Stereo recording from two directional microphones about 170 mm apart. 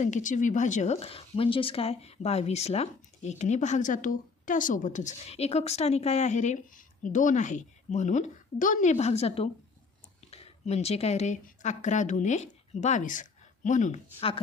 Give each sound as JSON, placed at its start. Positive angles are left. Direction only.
{"t": 0.0, "sound": "speech", "side_deg": 45}